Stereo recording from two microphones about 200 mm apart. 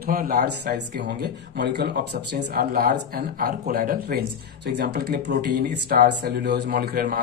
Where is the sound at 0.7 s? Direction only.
55° right (ahead or behind).